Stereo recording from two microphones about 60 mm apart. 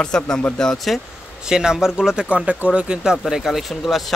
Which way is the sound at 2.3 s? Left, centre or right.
Right.